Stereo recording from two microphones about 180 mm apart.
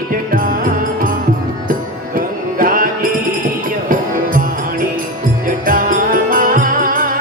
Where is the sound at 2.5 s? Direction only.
50° right (ahead or behind).